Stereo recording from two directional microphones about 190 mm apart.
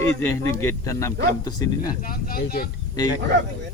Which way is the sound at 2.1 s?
50° left (ahead or behind).